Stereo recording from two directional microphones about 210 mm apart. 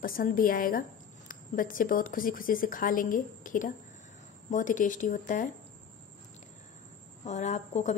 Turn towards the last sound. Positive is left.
turn(degrees=35)  # may be behind; listen again after turning